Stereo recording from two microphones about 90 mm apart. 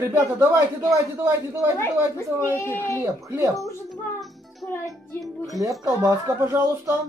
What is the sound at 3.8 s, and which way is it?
Music, centre (ahead or behind).